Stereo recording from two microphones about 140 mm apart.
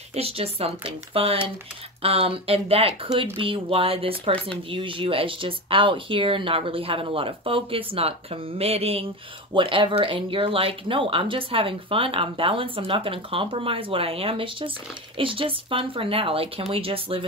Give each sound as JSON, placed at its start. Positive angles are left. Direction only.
{"t": 0.1, "sound": "speech", "side_deg": -45}